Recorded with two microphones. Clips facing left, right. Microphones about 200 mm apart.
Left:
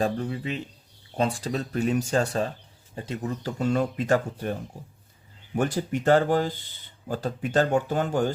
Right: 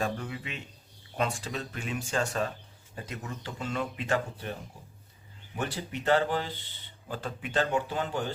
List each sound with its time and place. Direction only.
0.0 s speech: 35° left (ahead or behind)
5.5 s speech: 45° left (ahead or behind)